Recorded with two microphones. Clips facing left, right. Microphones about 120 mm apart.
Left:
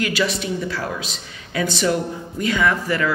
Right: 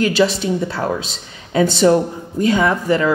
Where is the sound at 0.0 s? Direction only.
30° right (ahead or behind).